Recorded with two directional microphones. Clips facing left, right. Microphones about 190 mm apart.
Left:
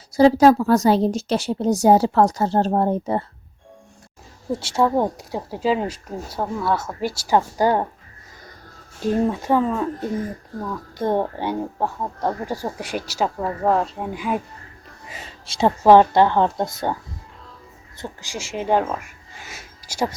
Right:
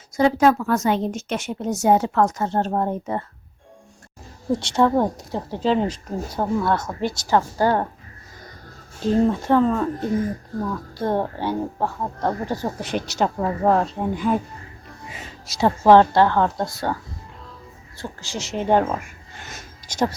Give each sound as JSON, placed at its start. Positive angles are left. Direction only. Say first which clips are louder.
{"t": 0.1, "sound": "speech", "louder": "left 4 dB", "side_deg": 35}
{"t": 4.6, "sound": "speech", "louder": "even", "side_deg": 5}
{"t": 9.0, "sound": "speech", "louder": "right 2 dB", "side_deg": 10}
{"t": 10.9, "sound": "speech", "louder": "left 3 dB", "side_deg": 15}
{"t": 15.4, "sound": "speech", "louder": "left 1 dB", "side_deg": 20}
{"t": 18.0, "sound": "speech", "louder": "right 1 dB", "side_deg": 15}